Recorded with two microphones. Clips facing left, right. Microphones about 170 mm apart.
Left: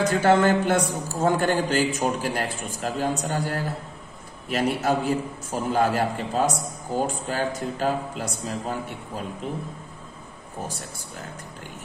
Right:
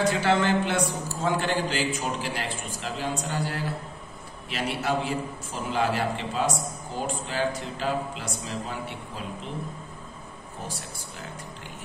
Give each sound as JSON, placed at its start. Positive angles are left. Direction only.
{"t": 0.1, "sound": "a man's voice", "side_deg": 45}